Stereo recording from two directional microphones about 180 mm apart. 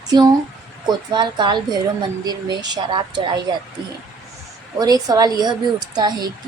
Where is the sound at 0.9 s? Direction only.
25° right (ahead or behind).